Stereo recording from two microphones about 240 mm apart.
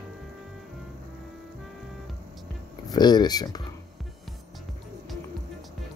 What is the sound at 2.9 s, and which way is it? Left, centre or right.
Speech, centre.